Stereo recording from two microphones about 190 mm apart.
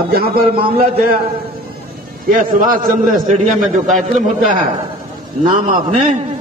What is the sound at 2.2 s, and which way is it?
A man's voice, 45° right (ahead or behind).